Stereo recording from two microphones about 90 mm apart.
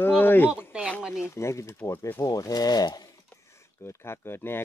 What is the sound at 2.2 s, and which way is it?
Speech, 45° left (ahead or behind).